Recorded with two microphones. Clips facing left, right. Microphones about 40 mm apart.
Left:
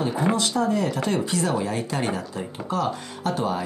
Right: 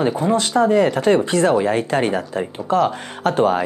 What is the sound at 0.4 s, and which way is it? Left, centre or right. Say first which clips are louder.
Speech: right 8 dB; right.